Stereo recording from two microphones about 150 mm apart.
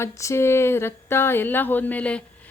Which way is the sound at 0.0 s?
20° left (ahead or behind).